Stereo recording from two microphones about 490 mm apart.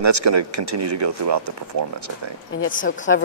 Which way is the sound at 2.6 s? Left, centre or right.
Left.